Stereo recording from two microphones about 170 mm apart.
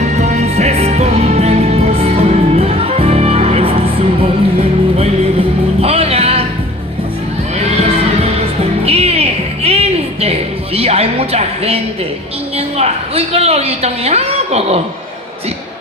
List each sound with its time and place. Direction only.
0.0 s music: 45° right (ahead or behind)
5.8 s music: 35° right (ahead or behind)
8.8 s music: 35° right (ahead or behind)
12.5 s a woman's voice: 35° right (ahead or behind)